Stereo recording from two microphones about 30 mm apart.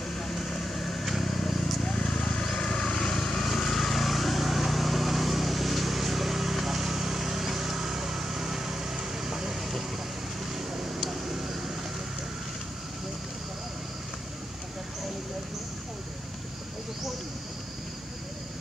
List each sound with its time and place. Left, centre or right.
0.1 s vehicle: centre
1.3 s vehicle: centre
10.5 s a sound: centre